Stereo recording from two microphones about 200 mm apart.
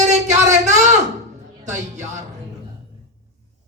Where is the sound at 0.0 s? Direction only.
35° right (ahead or behind).